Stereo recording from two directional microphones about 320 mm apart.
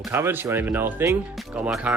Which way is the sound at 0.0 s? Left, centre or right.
Centre.